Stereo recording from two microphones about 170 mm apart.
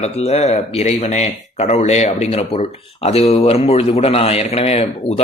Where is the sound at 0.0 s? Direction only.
40° left (ahead or behind).